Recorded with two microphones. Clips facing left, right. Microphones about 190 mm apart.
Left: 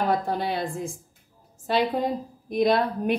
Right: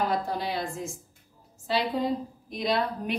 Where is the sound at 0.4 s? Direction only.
55° left (ahead or behind).